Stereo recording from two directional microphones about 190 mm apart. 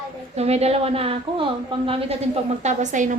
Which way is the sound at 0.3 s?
35° right (ahead or behind).